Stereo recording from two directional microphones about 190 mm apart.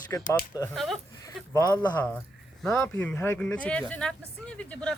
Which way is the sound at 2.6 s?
Centre (ahead or behind).